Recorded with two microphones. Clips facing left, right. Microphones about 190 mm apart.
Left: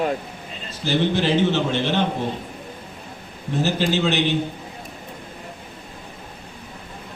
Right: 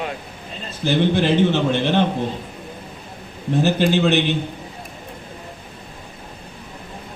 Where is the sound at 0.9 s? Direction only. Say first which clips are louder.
Right 3 dB; 55° right (ahead or behind).